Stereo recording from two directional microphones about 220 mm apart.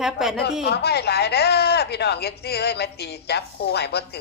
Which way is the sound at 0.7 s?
45° left (ahead or behind).